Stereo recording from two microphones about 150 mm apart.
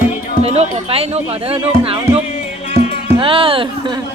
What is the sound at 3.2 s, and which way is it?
Speech, 35° right (ahead or behind).